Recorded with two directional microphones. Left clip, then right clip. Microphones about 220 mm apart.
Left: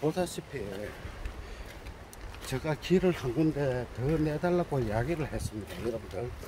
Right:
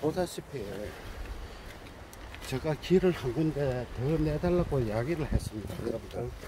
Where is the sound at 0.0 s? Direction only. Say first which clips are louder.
Even; 15° left (ahead or behind).